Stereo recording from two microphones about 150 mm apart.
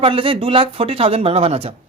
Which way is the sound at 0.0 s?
35° right (ahead or behind).